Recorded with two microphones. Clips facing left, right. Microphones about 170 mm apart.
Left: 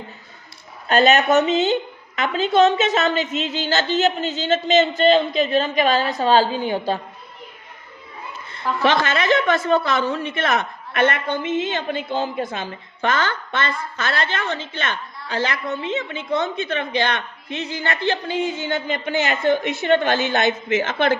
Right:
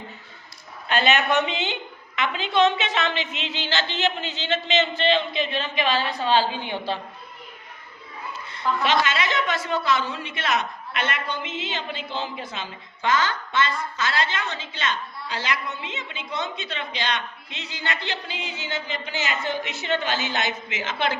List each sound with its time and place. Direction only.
0.9 s a woman's voice: 45° left (ahead or behind)
8.8 s a woman's voice: 55° left (ahead or behind)